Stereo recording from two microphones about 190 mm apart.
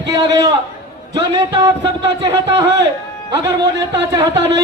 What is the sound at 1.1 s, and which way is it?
A man's voice, 20° right (ahead or behind).